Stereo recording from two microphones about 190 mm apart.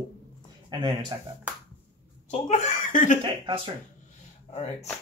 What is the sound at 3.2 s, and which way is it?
Speech, 25° right (ahead or behind).